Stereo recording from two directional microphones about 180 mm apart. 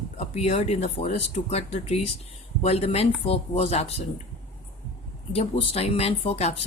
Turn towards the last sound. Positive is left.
turn(degrees=35)  # may be behind; listen again after turning